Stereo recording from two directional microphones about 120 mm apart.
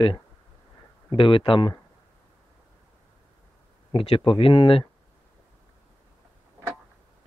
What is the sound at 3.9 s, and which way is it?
Speech, 55° left (ahead or behind).